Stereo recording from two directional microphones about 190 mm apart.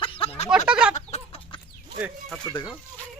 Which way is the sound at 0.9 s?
35° left (ahead or behind).